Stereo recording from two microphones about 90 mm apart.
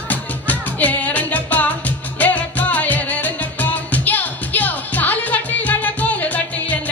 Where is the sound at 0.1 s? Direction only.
20° left (ahead or behind).